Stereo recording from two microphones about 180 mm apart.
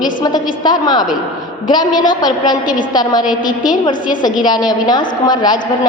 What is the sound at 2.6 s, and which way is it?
Speech, 45° left (ahead or behind).